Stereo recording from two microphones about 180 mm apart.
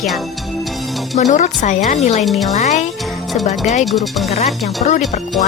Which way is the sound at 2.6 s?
40° left (ahead or behind).